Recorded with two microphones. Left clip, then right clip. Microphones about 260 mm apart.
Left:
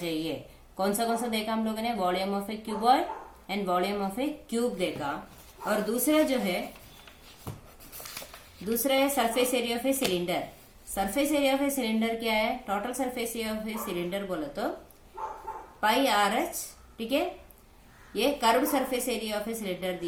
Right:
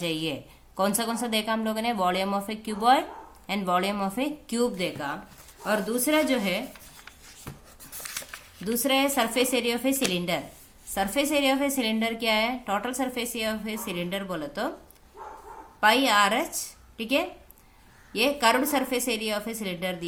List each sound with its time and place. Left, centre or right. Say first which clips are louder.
0.8 s a woman's voice: right 1 dB; right
8.8 s a woman's voice: right 1 dB; right
15.8 s a woman's voice: right 4 dB; right